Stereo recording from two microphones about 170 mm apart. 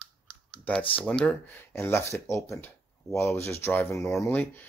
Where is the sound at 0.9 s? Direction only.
5° left (ahead or behind).